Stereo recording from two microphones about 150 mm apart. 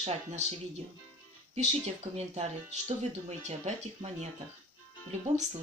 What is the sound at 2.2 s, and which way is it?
Speech, 45° right (ahead or behind).